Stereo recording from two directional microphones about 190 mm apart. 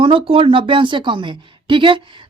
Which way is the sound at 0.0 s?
25° right (ahead or behind).